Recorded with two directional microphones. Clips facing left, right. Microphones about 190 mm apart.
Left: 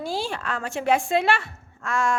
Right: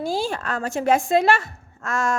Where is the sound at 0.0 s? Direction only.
45° right (ahead or behind).